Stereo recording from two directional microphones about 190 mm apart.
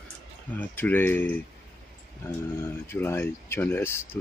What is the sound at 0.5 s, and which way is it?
Speech, 10° left (ahead or behind).